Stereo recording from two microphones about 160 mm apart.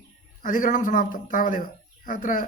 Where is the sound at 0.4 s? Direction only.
55° left (ahead or behind).